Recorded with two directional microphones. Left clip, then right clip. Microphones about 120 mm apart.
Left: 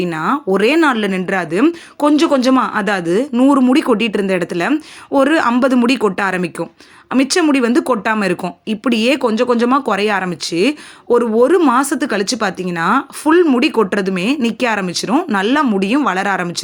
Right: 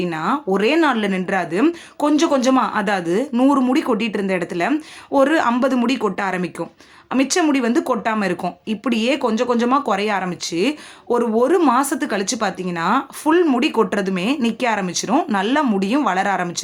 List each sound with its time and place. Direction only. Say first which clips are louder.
0.0 s speech: left 4 dB; 35° left (ahead or behind)